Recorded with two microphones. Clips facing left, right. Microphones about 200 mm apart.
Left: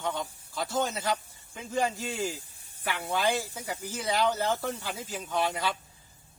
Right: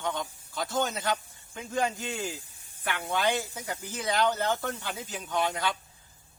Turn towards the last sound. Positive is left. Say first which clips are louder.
# even
turn(degrees=5)  # may be behind; listen again after turning